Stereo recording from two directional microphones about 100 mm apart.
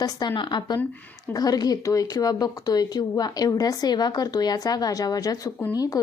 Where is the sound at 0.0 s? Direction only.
50° left (ahead or behind).